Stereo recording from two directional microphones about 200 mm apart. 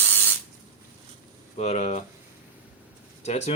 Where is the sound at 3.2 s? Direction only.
30° left (ahead or behind).